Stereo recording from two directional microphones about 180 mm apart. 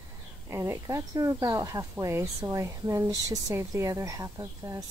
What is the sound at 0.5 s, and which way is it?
Speech, 15° right (ahead or behind).